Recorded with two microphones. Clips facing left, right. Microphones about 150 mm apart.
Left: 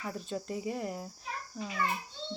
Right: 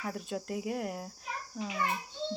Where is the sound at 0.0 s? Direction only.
5° right (ahead or behind).